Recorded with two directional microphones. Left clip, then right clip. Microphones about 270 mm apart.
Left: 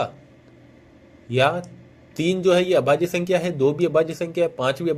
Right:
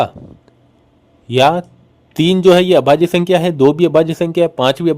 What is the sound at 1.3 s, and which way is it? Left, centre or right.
Speech, right.